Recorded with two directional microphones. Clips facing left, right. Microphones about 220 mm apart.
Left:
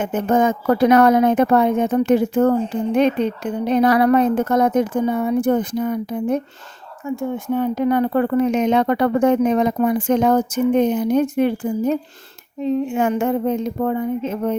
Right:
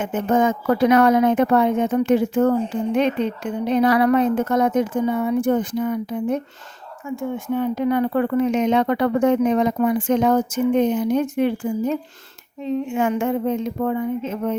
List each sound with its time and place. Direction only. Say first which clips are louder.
0.0 s speech: left 2 dB; 40° left (ahead or behind)